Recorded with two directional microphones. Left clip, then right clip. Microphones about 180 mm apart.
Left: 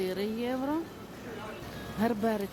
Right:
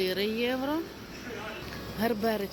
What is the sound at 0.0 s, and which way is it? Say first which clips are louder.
Speech: right 4 dB; 15° left (ahead or behind).